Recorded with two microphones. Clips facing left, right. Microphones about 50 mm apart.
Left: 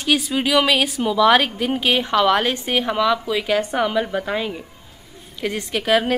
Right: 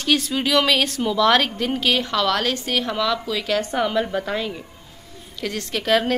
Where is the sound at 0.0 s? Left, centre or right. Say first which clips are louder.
Left 1 dB; centre.